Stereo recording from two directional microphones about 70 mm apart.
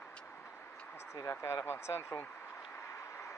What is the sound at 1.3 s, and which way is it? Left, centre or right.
Speech, left.